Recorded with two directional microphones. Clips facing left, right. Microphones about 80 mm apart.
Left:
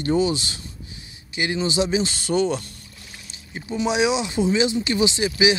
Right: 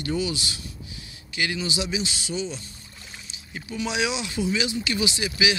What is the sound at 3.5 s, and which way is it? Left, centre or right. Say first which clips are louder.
Speech: left 6 dB; left.